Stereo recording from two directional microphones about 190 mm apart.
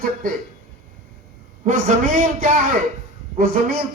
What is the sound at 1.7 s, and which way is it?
A man's voice, 45° right (ahead or behind).